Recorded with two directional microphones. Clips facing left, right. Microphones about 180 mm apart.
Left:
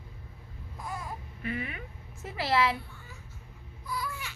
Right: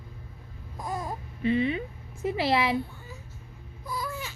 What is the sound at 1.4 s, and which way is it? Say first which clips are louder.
A woman's voice: right 11 dB; 25° right (ahead or behind).